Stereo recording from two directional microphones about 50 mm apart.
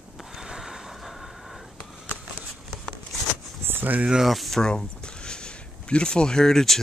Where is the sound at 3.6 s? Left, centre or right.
Right.